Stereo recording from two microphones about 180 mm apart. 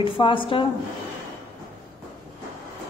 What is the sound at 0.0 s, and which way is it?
Speech, 30° left (ahead or behind).